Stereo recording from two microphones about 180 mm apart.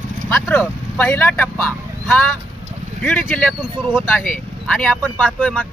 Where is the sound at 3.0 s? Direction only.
10° left (ahead or behind).